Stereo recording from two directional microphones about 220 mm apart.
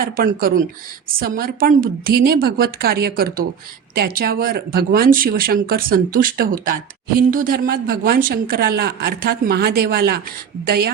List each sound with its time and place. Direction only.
0.0 s a woman's voice: 40° right (ahead or behind)